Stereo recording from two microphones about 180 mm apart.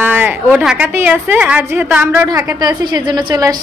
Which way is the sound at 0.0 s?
10° right (ahead or behind).